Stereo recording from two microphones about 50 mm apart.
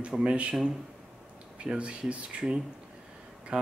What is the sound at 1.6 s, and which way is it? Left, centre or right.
Speech, right.